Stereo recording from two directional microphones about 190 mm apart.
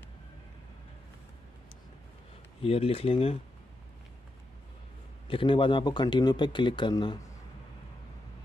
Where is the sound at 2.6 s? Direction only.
30° left (ahead or behind).